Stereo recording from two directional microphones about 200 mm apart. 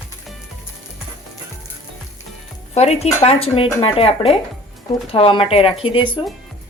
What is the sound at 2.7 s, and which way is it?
Speech, 35° left (ahead or behind).